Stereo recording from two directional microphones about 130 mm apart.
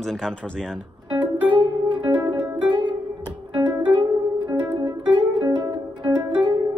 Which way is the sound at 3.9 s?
35° right (ahead or behind).